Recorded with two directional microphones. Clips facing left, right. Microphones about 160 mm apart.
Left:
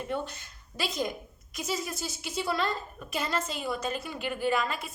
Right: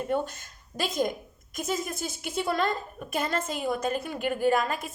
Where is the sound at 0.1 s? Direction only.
45° right (ahead or behind).